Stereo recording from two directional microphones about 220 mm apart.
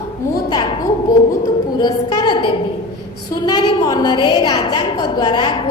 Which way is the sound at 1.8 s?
20° left (ahead or behind).